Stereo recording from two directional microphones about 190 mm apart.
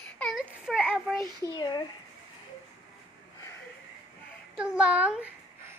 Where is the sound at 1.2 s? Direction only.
15° right (ahead or behind).